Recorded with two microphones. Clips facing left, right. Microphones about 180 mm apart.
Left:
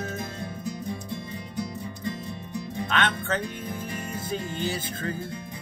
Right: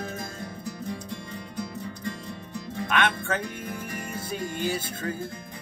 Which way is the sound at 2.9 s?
10° right (ahead or behind).